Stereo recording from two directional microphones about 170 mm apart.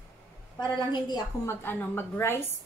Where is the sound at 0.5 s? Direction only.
25° left (ahead or behind).